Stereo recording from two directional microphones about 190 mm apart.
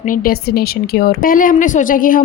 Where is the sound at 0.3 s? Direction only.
55° left (ahead or behind).